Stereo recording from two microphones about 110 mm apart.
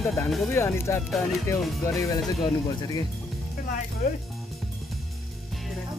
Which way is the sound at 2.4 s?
35° left (ahead or behind).